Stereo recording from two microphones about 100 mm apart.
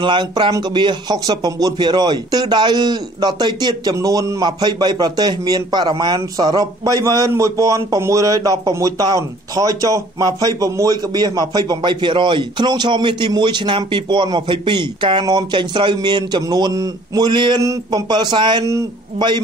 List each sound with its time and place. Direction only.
0.0 s a man's voice: 50° right (ahead or behind)
17.3 s a man's voice: 55° right (ahead or behind)